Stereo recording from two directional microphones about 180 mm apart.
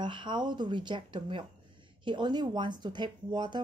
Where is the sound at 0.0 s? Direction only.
25° right (ahead or behind).